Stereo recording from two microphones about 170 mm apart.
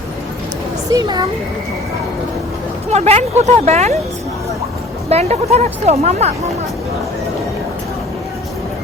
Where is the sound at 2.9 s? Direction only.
40° right (ahead or behind).